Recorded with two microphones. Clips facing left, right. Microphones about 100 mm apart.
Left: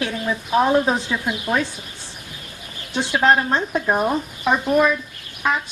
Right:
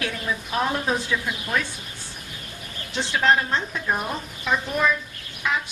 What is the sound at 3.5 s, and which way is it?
Speech, 35° left (ahead or behind).